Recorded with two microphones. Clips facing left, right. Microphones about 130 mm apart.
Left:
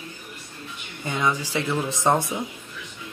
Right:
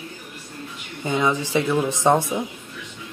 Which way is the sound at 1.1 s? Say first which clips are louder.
Right 3 dB; 20° right (ahead or behind).